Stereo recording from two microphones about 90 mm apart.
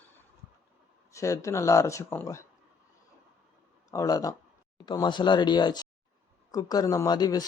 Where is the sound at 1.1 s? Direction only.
35° left (ahead or behind).